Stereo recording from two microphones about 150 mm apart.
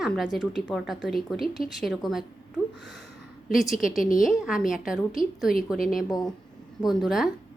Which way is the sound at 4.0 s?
65° left (ahead or behind).